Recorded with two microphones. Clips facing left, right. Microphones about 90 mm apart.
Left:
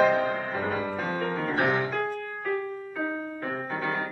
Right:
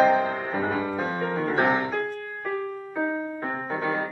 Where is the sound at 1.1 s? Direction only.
20° right (ahead or behind).